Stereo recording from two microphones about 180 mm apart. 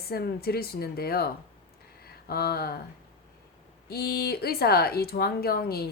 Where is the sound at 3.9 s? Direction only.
60° left (ahead or behind).